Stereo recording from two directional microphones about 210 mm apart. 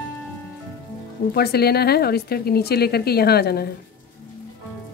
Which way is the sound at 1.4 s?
50° left (ahead or behind).